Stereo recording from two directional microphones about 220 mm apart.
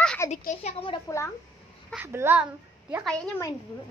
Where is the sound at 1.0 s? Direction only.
15° left (ahead or behind).